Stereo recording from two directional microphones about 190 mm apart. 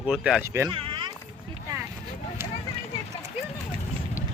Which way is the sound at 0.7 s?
25° right (ahead or behind).